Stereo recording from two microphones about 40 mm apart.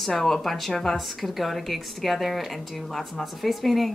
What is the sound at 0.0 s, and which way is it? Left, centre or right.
Speech, centre.